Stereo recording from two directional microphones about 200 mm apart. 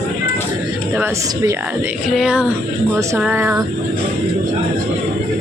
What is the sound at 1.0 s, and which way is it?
Speech, 15° right (ahead or behind).